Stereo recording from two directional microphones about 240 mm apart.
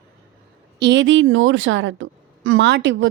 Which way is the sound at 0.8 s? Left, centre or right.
Right.